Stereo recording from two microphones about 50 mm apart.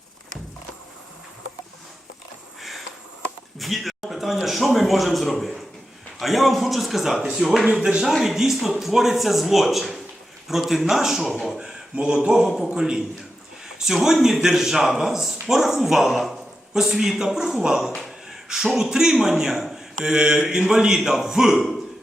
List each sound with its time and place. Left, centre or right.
2.6 s sniff: centre
3.6 s a man's voice: centre
11.5 s a sound: centre
11.9 s a man's voice: centre
12.5 s speech: centre
12.7 s a man's voice: centre